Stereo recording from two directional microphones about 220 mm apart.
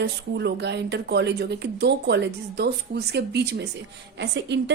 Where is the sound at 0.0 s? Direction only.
50° right (ahead or behind).